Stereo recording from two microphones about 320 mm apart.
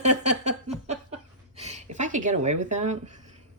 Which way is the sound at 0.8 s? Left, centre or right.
Right.